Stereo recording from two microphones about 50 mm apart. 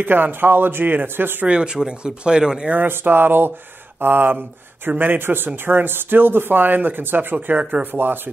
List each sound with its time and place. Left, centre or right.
0.0 s speech: right
1.5 s speech: centre
2.9 s speech: right
7.4 s speech: right
7.8 s speech: right